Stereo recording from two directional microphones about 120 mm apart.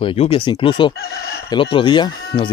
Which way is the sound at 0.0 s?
50° left (ahead or behind).